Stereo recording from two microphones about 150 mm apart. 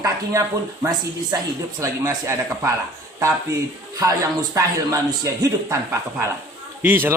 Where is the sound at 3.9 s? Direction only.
25° right (ahead or behind).